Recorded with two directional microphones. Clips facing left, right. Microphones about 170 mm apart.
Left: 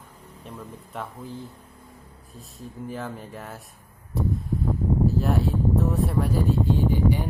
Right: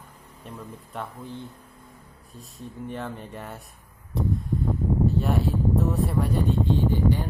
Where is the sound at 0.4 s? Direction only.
Centre (ahead or behind).